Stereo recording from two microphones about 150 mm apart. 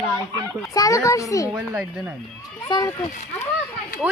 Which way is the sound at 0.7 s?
20° left (ahead or behind).